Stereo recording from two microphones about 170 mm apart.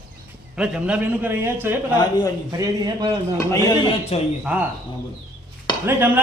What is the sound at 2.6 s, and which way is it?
Speech, 25° right (ahead or behind).